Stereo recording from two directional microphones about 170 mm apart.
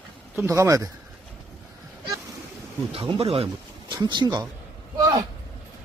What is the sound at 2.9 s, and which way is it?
Speech, 35° right (ahead or behind).